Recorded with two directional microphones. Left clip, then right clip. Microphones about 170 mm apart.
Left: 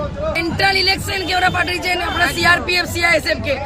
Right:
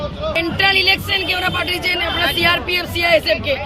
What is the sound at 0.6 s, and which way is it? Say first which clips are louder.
Speech: right 2 dB; 20° left (ahead or behind).